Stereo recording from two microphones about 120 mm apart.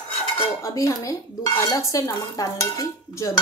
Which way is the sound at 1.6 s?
25° left (ahead or behind).